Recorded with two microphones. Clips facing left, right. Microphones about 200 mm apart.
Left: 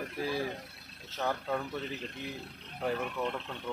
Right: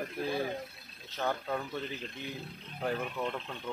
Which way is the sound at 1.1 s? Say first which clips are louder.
Even; centre (ahead or behind).